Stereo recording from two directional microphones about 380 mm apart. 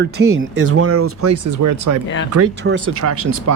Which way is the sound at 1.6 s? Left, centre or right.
Right.